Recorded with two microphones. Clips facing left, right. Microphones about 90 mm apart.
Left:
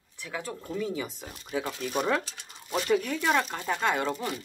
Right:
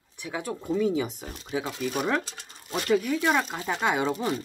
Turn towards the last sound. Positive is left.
turn(degrees=-15)  # may be behind; listen again after turning